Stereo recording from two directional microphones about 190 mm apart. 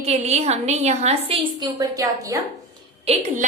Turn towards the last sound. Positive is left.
turn(degrees=-30)  # may be behind; listen again after turning